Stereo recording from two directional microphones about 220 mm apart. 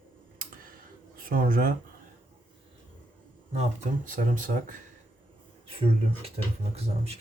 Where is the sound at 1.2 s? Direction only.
40° right (ahead or behind).